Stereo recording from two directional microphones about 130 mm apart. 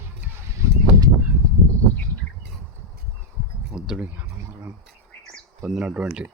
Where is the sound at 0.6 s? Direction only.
30° right (ahead or behind).